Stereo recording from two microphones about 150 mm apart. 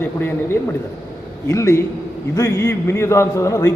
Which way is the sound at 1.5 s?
20° left (ahead or behind).